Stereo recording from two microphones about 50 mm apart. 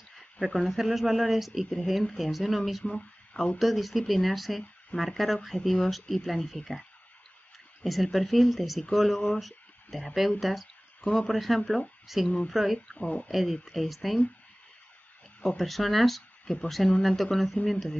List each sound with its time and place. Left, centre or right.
0.2 s a sound: centre
0.7 s speech: centre
2.8 s speech: left
3.5 s speech: centre
10.4 s a sound: centre
11.1 s speech: centre
12.7 s speech: left
13.3 s speech: centre
15.4 s speech: centre